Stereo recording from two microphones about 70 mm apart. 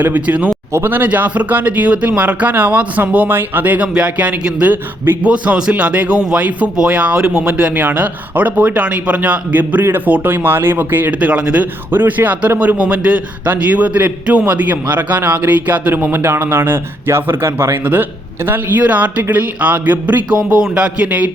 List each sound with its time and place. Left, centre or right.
0.0 s a man's voice: right
11.9 s a man's voice: right
20.3 s a man's voice: centre